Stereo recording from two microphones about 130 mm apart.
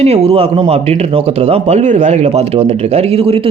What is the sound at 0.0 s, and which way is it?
Speech, 55° right (ahead or behind).